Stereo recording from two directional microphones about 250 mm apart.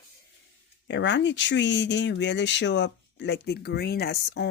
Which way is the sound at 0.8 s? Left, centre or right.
Left.